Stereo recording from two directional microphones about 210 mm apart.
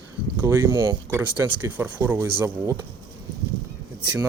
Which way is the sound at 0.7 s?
20° right (ahead or behind).